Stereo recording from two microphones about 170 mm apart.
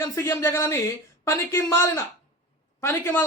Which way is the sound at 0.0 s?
15° left (ahead or behind).